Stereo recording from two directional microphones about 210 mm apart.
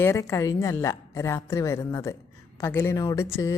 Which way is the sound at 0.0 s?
15° left (ahead or behind).